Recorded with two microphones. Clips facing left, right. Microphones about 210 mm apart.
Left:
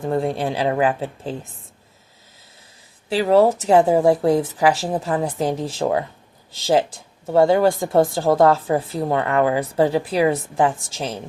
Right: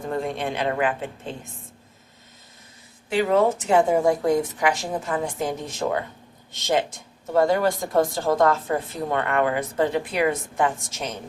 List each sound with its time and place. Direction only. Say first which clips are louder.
0.1 s a woman's voice: left 5 dB; 35° left (ahead or behind)
3.1 s a woman's voice: left 4 dB; 35° left (ahead or behind)